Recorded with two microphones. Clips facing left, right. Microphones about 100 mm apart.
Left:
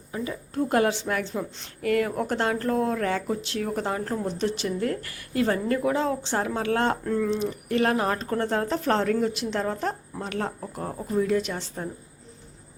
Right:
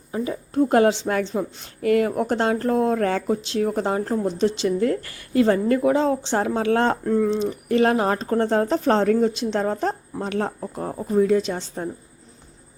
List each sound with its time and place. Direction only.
0.1 s speech: 25° right (ahead or behind)
2.9 s speech: 35° right (ahead or behind)
3.2 s speech: 25° right (ahead or behind)